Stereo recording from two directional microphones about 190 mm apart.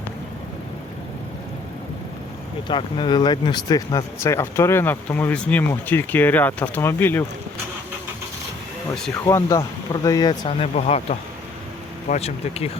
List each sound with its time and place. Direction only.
2.6 s speech: 25° left (ahead or behind)
9.1 s speech: 15° left (ahead or behind)
10.8 s speech: 35° left (ahead or behind)